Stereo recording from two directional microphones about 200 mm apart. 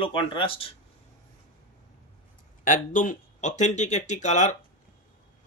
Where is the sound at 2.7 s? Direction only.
40° left (ahead or behind).